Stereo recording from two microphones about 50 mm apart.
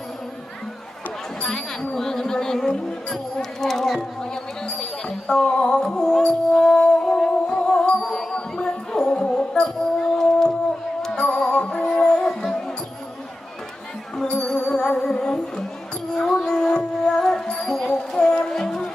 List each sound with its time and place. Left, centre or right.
1.4 s speech: centre
4.6 s music: centre
14.2 s music: centre
17.8 s music: centre